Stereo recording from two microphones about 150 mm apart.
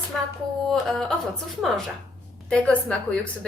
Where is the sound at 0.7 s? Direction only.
5° left (ahead or behind).